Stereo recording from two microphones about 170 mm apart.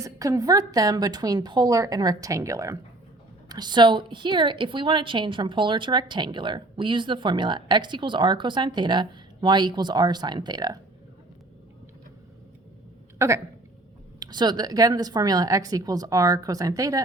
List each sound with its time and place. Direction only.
0.0 s a woman's voice: 20° right (ahead or behind)
13.1 s a woman's voice: 15° right (ahead or behind)